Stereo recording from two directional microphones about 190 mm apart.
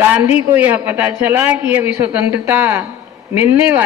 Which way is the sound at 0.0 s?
10° right (ahead or behind).